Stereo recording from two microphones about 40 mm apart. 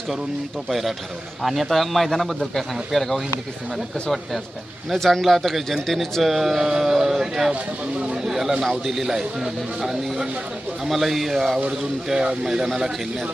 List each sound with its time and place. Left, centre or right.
0.7 s a man's voice: centre
4.9 s a man's voice: centre
7.9 s speech: right
8.2 s a man's voice: centre